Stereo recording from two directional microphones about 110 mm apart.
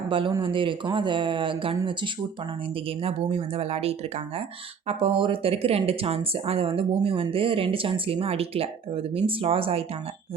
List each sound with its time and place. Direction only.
0.1 s speech: 50° right (ahead or behind)
2.7 s speech: 60° right (ahead or behind)